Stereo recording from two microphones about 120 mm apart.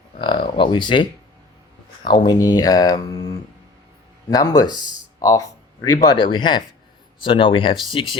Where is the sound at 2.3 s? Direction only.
30° left (ahead or behind).